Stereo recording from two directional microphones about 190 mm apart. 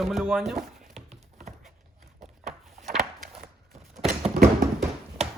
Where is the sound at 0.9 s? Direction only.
35° right (ahead or behind).